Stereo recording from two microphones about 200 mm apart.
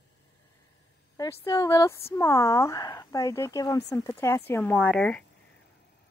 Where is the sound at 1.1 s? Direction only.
15° left (ahead or behind).